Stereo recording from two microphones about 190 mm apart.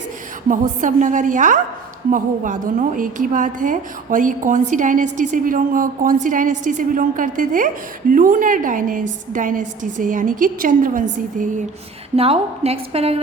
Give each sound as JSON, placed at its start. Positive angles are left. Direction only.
{"t": 0.4, "sound": "a woman's voice", "side_deg": -45}
{"t": 12.1, "sound": "a woman's voice", "side_deg": -30}